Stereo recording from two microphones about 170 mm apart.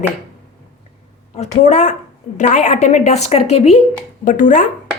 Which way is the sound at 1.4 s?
45° left (ahead or behind).